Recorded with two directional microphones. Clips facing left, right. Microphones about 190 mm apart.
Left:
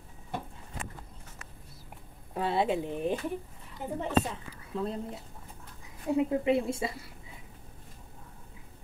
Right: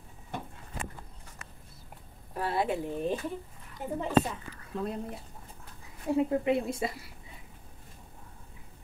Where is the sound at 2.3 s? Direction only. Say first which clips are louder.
Left 2 dB; 20° left (ahead or behind).